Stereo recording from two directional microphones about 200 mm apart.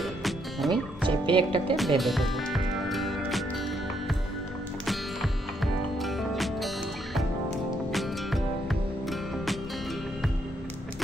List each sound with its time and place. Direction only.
0.0 s music: centre (ahead or behind)
1.0 s speech: 25° right (ahead or behind)
1.8 s music: centre (ahead or behind)
5.9 s music: centre (ahead or behind)
7.9 s music: centre (ahead or behind)